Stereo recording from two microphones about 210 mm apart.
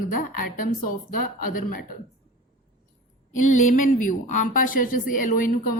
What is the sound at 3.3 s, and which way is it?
A woman's voice, 35° left (ahead or behind).